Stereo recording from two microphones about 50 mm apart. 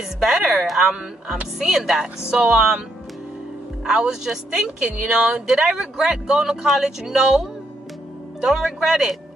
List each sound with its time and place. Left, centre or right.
0.2 s speech: centre
3.8 s speech: centre